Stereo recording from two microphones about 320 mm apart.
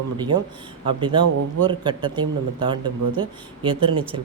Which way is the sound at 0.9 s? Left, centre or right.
Centre.